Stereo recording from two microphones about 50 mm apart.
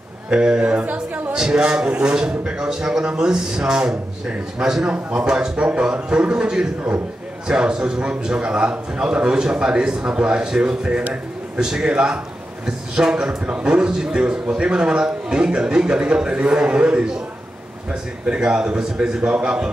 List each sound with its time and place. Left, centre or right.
0.3 s a man's voice: centre
1.3 s a man's voice: centre
4.8 s a man's voice: right
18.2 s a man's voice: centre